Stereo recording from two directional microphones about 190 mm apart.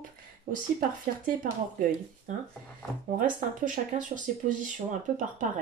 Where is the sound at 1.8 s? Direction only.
45° right (ahead or behind).